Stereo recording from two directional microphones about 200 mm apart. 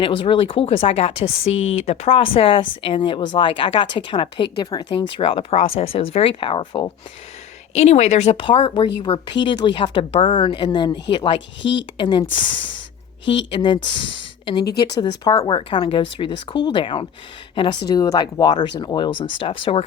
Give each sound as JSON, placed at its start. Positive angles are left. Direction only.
{"t": 0.0, "sound": "speech", "side_deg": 25}
{"t": 7.7, "sound": "speech", "side_deg": 35}
{"t": 11.3, "sound": "speech", "side_deg": 65}
{"t": 11.9, "sound": "speech", "side_deg": 25}
{"t": 13.5, "sound": "speech", "side_deg": 25}
{"t": 15.2, "sound": "a woman's voice", "side_deg": 20}